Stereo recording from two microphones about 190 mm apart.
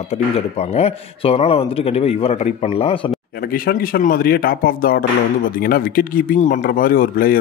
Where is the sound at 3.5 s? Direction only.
50° left (ahead or behind).